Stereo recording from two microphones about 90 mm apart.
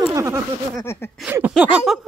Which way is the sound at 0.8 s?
30° left (ahead or behind).